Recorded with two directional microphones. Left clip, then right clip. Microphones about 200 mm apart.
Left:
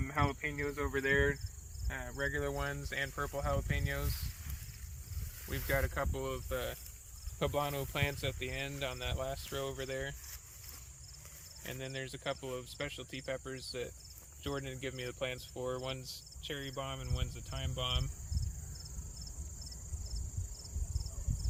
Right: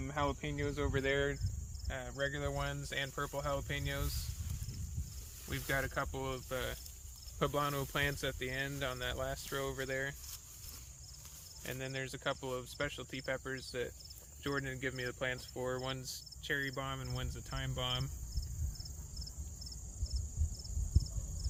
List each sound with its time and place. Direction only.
0.0 s speech: 40° right (ahead or behind); by 4.1 s 55° right (ahead or behind)
5.5 s cricket: 55° right (ahead or behind)
7.3 s speech: 40° right (ahead or behind)
11.6 s speech: 25° right (ahead or behind)